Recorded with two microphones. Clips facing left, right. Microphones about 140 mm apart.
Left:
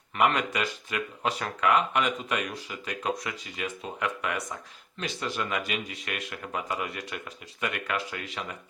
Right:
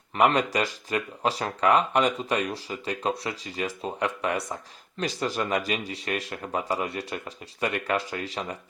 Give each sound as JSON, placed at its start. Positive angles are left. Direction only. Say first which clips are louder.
{"t": 0.2, "sound": "speech", "louder": "right 3 dB", "side_deg": -35}